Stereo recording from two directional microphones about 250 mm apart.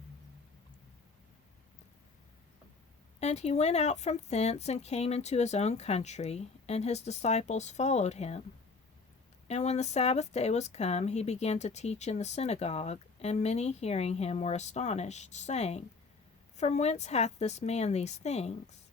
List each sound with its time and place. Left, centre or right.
3.2 s speech: left
9.5 s speech: left